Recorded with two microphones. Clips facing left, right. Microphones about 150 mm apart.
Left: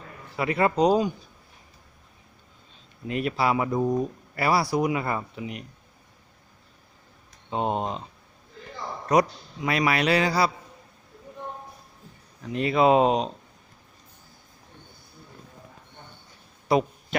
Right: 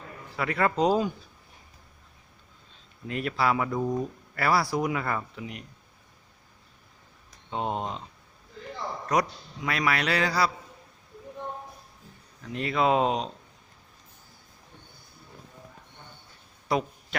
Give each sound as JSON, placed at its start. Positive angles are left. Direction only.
{"t": 0.3, "sound": "speech", "side_deg": 20}
{"t": 3.1, "sound": "a man's voice", "side_deg": 15}
{"t": 7.5, "sound": "a man's voice", "side_deg": 20}
{"t": 9.6, "sound": "a man's voice", "side_deg": 20}
{"t": 12.5, "sound": "speech", "side_deg": 15}
{"t": 16.6, "sound": "a sound", "side_deg": 20}